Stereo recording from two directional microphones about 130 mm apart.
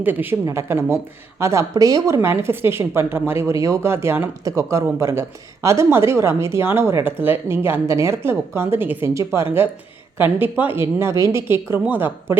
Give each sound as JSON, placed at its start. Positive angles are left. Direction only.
{"t": 0.0, "sound": "a woman's voice", "side_deg": -15}